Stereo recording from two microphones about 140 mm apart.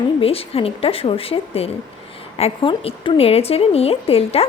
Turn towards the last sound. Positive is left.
turn(degrees=45)  # may be behind; listen again after turning